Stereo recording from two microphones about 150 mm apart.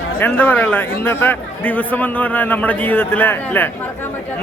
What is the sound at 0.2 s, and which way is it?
A man's voice, 10° left (ahead or behind).